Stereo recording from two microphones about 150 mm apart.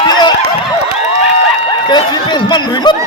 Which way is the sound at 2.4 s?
30° left (ahead or behind).